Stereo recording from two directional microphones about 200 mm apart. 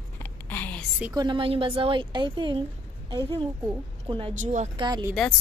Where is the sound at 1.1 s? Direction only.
20° right (ahead or behind).